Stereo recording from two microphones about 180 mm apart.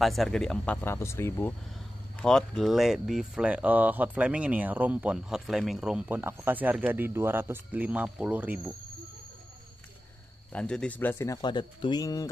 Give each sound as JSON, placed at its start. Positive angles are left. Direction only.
{"t": 0.0, "sound": "speech", "side_deg": 0}
{"t": 10.5, "sound": "speech", "side_deg": 5}
{"t": 11.4, "sound": "speech", "side_deg": 25}